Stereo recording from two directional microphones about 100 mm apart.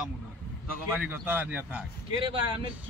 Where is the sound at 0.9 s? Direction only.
15° right (ahead or behind).